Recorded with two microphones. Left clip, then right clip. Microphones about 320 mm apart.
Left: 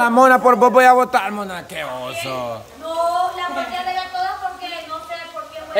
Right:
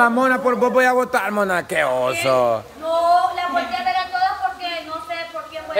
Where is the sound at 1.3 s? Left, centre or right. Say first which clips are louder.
Right 8 dB; centre.